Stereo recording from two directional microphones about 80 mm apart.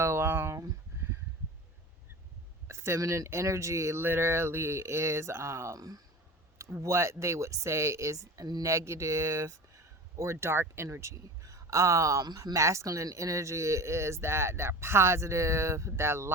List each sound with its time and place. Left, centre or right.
0.0 s a sound: right
2.6 s speech: right
12.2 s speech: right